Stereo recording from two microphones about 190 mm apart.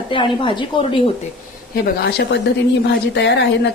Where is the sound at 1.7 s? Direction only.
60° left (ahead or behind).